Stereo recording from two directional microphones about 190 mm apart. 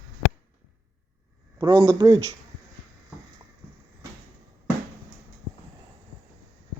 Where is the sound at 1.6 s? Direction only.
20° right (ahead or behind).